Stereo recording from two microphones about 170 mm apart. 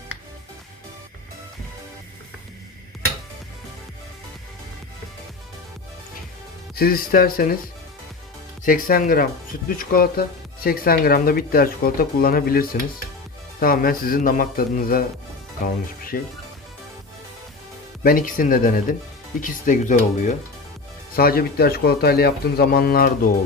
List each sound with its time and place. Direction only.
6.7 s speech: 60° left (ahead or behind)
8.6 s speech: 55° left (ahead or behind)
18.0 s speech: 55° left (ahead or behind)
21.2 s speech: 60° left (ahead or behind)